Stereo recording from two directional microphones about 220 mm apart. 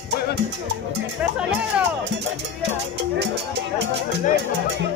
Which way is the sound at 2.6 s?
50° right (ahead or behind).